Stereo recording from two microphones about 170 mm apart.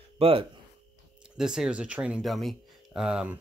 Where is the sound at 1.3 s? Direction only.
5° right (ahead or behind).